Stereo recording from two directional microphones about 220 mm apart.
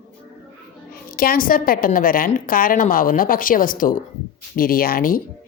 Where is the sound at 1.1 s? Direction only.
40° left (ahead or behind).